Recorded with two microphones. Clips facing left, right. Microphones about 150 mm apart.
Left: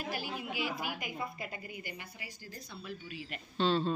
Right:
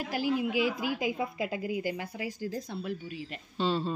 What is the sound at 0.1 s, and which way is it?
A woman's voice, 90° right.